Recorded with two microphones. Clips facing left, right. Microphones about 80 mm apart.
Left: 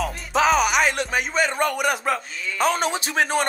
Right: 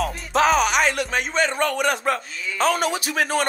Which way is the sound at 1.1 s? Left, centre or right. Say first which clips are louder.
Even; centre.